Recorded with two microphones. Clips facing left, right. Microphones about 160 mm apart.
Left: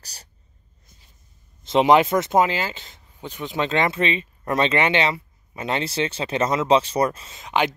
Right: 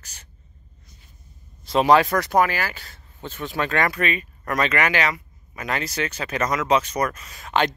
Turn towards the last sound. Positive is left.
turn(degrees=15)  # may be behind; listen again after turning